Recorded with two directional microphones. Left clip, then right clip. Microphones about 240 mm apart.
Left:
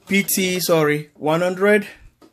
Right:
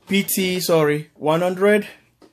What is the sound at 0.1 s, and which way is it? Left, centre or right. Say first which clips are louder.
Speech: left 1 dB; centre.